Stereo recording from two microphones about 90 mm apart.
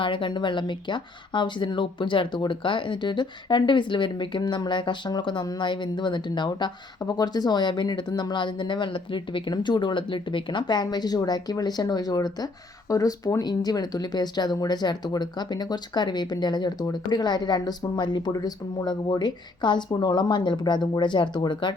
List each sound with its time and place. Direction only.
0.0 s speech: 70° left (ahead or behind)
7.0 s speech: 45° left (ahead or behind); by 21.8 s 60° left (ahead or behind)